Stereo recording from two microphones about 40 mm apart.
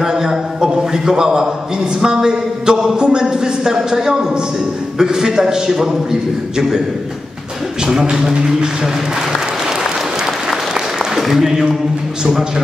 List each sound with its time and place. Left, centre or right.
0.2 s a sound: centre
2.0 s speech: centre
7.8 s speech: centre
11.1 s speech: centre